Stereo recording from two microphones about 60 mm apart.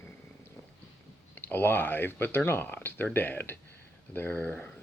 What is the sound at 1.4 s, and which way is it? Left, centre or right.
Speech, left.